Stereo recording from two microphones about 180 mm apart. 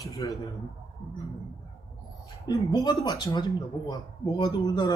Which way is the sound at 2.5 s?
20° left (ahead or behind).